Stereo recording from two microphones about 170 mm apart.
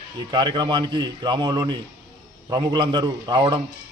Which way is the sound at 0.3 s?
25° right (ahead or behind).